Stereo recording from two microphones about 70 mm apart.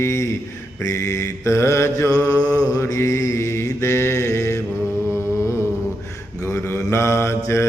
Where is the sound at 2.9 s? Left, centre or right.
Left.